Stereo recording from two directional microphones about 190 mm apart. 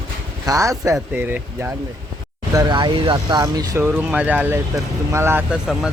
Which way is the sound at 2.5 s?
20° right (ahead or behind).